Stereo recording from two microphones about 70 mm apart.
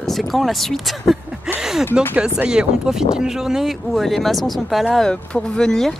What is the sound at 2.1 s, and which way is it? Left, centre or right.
Speech, centre.